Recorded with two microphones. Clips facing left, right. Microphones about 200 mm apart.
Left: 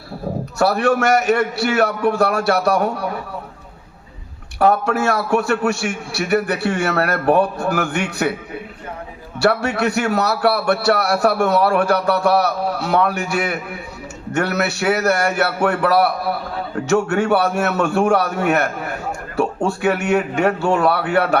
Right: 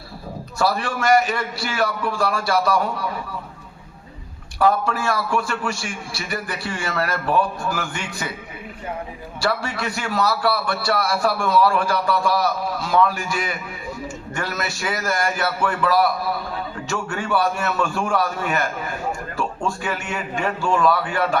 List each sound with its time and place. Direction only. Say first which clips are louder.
0.6 s a man's voice: left 6 dB; 65° left (ahead or behind)
4.6 s a man's voice: left 4 dB; 70° left (ahead or behind)
9.4 s a man's voice: left 7 dB; 65° left (ahead or behind)